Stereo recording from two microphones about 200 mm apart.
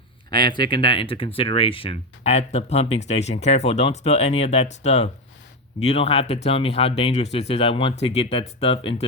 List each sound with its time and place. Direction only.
0.3 s speech: 20° left (ahead or behind)